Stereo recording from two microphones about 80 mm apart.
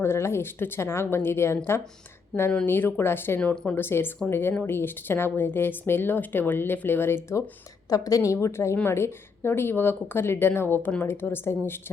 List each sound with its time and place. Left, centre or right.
0.0 s speech: left
2.6 s a woman's voice: left
3.5 s speech: centre
3.8 s a woman's voice: left
7.9 s a woman's voice: left